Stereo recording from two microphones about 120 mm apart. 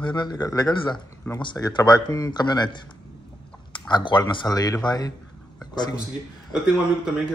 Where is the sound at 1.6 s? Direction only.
35° left (ahead or behind).